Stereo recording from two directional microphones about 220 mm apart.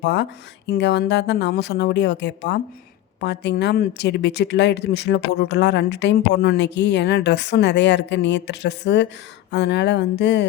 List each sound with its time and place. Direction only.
0.0 s a woman's voice: 50° left (ahead or behind)